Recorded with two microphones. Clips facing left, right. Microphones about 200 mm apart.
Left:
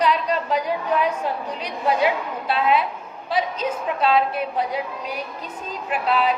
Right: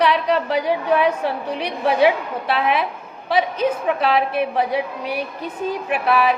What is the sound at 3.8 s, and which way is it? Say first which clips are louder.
Speech: left 3 dB; 75° right (ahead or behind).